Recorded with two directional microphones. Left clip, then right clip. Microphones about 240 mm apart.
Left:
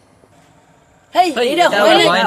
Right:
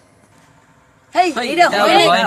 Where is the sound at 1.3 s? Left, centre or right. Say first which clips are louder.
Left 1 dB; centre.